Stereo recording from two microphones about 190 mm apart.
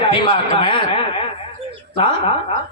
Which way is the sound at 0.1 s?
30° left (ahead or behind).